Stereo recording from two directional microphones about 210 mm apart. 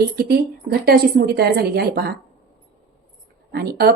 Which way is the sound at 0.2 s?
50° right (ahead or behind).